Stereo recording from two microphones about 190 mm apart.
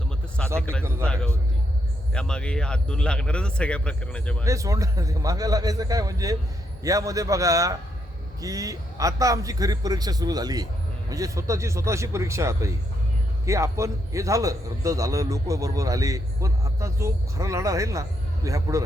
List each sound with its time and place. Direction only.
0.6 s speech: 5° left (ahead or behind)
4.4 s a man's voice: 15° right (ahead or behind)